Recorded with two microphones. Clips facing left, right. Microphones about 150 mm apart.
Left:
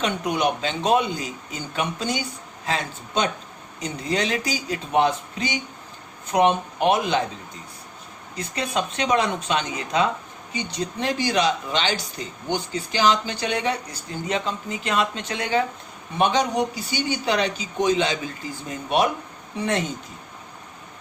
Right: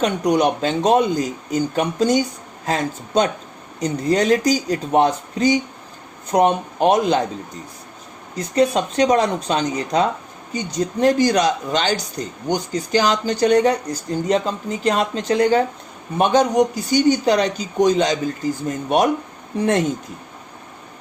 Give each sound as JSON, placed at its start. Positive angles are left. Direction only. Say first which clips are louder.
{"t": 0.0, "sound": "speech", "louder": "right 6 dB", "side_deg": -45}
{"t": 8.4, "sound": "speech", "louder": "right 9 dB", "side_deg": -40}